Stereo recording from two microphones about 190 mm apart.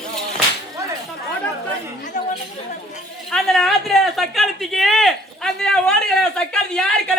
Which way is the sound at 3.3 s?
Centre (ahead or behind).